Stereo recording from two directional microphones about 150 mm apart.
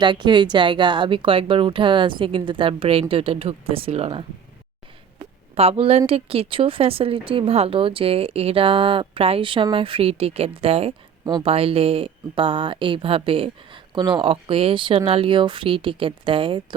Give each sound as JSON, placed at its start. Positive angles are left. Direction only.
{"t": 0.0, "sound": "speech", "side_deg": -30}
{"t": 5.5, "sound": "a woman's voice", "side_deg": -40}